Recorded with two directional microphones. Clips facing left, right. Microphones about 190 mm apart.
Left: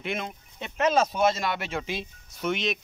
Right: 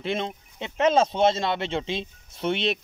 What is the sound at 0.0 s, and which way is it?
Speech, 30° right (ahead or behind).